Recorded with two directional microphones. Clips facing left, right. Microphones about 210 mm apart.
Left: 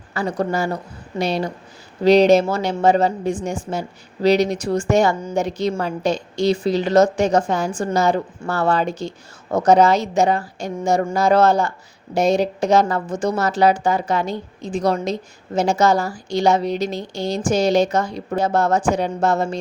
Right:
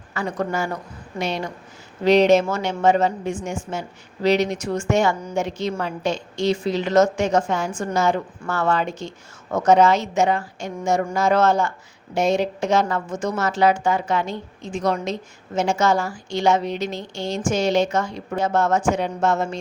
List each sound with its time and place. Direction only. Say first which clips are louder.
0.1 s a woman's voice: left 3 dB; 35° left (ahead or behind)